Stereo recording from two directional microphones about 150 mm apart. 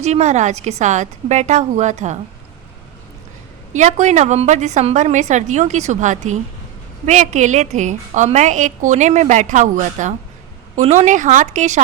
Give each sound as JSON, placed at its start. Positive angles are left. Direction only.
{"t": 0.0, "sound": "a woman's voice", "side_deg": -50}
{"t": 3.7, "sound": "a woman's voice", "side_deg": -55}